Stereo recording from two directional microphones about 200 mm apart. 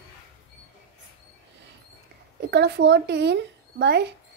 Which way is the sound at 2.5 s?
55° right (ahead or behind).